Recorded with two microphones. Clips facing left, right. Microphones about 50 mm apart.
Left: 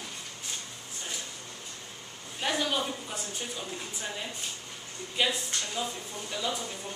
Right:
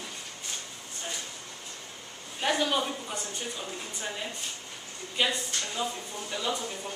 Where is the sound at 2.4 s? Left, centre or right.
Centre.